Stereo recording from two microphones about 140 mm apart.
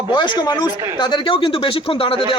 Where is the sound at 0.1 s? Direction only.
35° left (ahead or behind).